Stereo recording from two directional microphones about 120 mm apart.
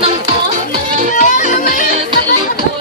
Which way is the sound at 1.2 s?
90° left.